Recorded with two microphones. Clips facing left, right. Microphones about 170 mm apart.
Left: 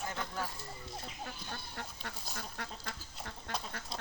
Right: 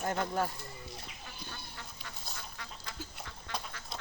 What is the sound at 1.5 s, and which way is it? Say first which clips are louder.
Goat: left 3 dB; 55° left (ahead or behind).